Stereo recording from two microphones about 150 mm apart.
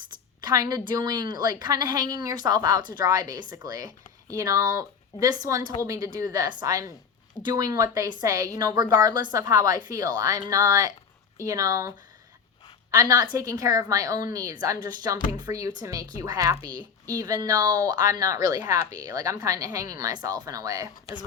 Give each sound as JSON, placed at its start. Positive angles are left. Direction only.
{"t": 0.4, "sound": "a woman's voice", "side_deg": -25}